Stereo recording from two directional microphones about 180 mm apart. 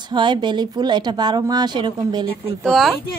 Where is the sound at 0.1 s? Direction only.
25° right (ahead or behind).